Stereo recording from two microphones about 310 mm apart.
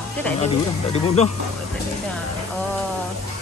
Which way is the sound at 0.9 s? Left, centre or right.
Centre.